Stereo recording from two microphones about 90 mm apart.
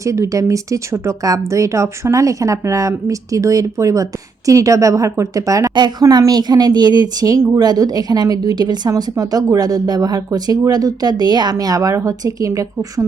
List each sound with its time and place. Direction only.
0.0 s speech: 35° right (ahead or behind)
5.7 s speech: 50° right (ahead or behind)
11.5 s speech: 40° right (ahead or behind)